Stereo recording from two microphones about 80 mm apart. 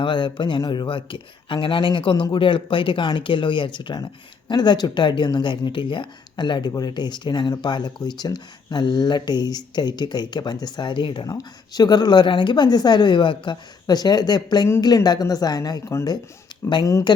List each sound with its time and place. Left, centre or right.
0.0 s speech: left
11.3 s speech: left